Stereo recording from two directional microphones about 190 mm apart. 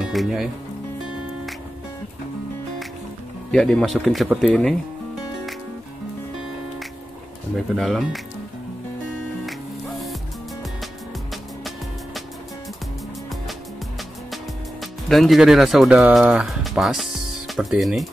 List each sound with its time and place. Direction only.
0.0 s speech: centre (ahead or behind)
3.5 s speech: centre (ahead or behind)
7.7 s speech: centre (ahead or behind)
9.5 s music: centre (ahead or behind)
14.3 s speech: centre (ahead or behind)